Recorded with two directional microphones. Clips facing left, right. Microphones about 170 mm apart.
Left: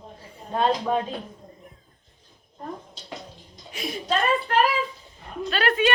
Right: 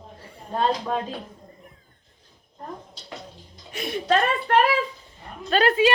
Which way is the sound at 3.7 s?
55° right (ahead or behind).